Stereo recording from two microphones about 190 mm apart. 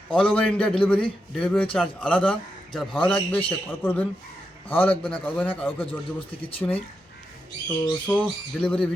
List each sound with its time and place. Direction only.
0.1 s a man's voice: 5° left (ahead or behind)
8.0 s a man's voice: 5° left (ahead or behind)